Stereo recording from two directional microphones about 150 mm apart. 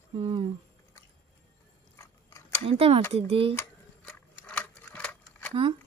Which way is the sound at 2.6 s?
40° right (ahead or behind).